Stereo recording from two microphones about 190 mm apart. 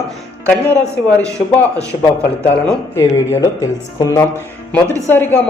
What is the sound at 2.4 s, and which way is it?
A woman's voice, 10° left (ahead or behind).